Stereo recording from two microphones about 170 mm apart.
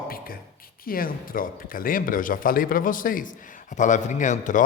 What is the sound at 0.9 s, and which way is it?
A man's voice, 55° left (ahead or behind).